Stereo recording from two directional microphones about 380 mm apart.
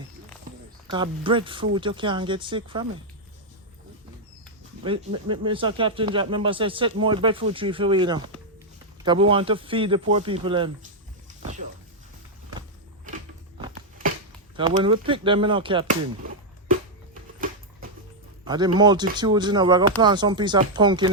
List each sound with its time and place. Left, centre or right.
0.9 s speech: centre
4.8 s speech: centre
14.5 s speech: centre
17.4 s a sound: right
18.4 s speech: centre